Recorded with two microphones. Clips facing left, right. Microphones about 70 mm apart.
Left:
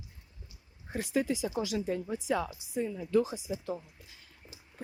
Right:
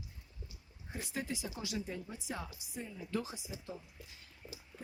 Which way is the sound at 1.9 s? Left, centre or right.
Left.